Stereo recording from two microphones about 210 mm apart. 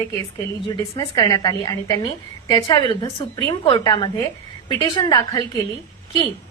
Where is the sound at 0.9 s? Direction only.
20° left (ahead or behind).